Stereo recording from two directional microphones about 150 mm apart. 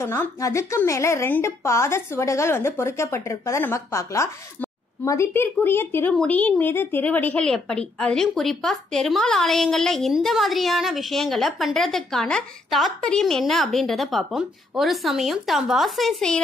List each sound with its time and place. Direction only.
0.0 s a woman's voice: 15° left (ahead or behind); by 16.3 s centre (ahead or behind)